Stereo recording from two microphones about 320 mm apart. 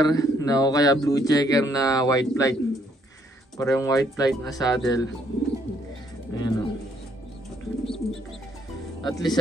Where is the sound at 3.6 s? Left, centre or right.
Centre.